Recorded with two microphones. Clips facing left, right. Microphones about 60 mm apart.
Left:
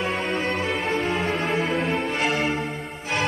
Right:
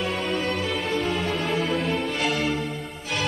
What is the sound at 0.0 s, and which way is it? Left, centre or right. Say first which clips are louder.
Music: left 1 dB; left.